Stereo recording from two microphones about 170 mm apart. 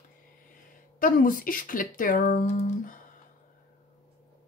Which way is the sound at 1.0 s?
55° left (ahead or behind).